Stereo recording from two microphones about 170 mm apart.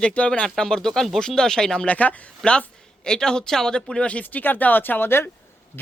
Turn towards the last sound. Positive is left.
turn(degrees=15)  # may be behind; listen again after turning